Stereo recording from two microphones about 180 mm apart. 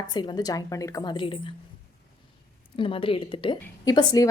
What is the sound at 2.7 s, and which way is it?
A woman's voice, 30° left (ahead or behind).